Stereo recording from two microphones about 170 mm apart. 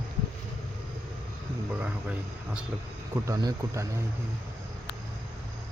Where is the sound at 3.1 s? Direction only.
20° right (ahead or behind).